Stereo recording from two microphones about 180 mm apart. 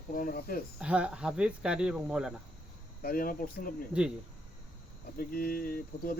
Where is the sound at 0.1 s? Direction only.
50° left (ahead or behind).